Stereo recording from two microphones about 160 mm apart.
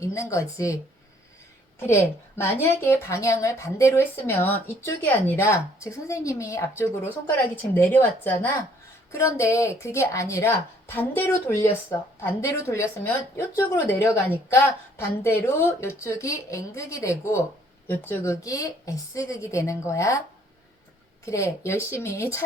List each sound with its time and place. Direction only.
0.0 s a woman's voice: 20° left (ahead or behind)
1.8 s a woman's voice: 15° left (ahead or behind)
21.2 s a woman's voice: 20° left (ahead or behind)